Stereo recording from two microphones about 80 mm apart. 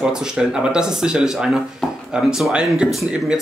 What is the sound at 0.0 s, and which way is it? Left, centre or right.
Speech, centre.